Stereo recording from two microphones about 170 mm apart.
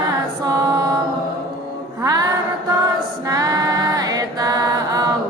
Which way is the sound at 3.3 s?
20° right (ahead or behind).